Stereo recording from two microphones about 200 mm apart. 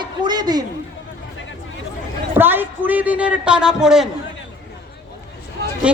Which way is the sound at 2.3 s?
10° right (ahead or behind).